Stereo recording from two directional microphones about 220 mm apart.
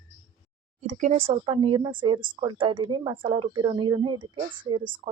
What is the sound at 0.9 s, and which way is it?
Speech, 30° right (ahead or behind).